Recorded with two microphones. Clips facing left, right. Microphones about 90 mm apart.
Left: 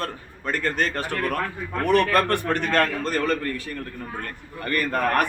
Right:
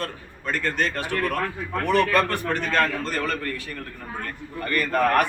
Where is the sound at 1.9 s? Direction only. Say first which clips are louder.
Left 1 dB; 55° left (ahead or behind).